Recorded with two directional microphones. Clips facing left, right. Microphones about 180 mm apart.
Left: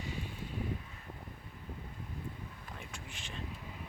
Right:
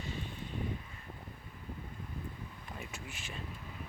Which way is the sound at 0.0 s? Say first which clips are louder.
Even; 10° left (ahead or behind).